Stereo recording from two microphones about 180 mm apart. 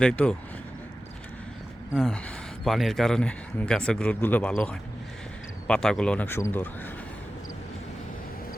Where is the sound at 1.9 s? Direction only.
Centre (ahead or behind).